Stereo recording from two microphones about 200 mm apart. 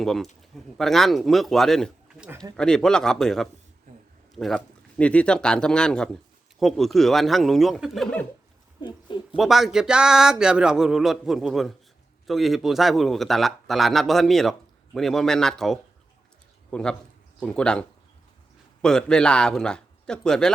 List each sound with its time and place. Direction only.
0.0 s speech: centre (ahead or behind)
2.3 s speech: 20° right (ahead or behind)
2.6 s speech: 5° left (ahead or behind)
9.3 s speech: centre (ahead or behind)
17.4 s speech: 5° left (ahead or behind)